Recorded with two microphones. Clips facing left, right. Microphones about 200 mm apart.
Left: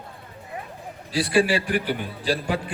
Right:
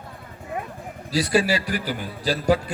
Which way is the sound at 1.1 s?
40° right (ahead or behind).